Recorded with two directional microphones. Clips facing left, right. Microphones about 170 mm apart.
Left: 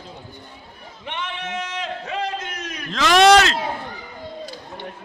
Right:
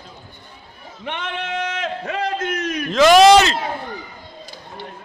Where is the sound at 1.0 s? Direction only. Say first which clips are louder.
Right 3 dB; 60° right (ahead or behind).